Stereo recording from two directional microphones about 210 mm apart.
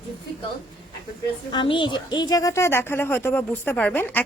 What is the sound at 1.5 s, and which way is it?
A woman's voice, 25° left (ahead or behind).